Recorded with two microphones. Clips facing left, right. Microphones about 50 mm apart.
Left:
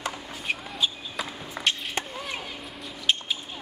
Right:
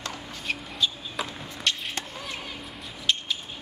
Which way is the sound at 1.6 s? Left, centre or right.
Left.